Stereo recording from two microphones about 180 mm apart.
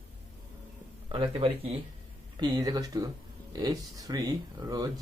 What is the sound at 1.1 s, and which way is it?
Speech, 30° right (ahead or behind).